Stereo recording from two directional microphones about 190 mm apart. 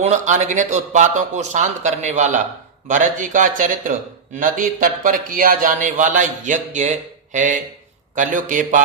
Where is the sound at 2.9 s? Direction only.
45° right (ahead or behind).